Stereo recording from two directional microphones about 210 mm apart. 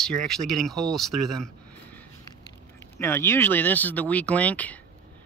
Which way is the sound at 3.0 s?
10° left (ahead or behind).